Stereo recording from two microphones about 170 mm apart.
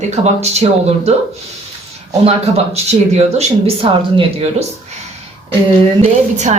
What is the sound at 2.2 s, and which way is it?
Speech, 35° right (ahead or behind).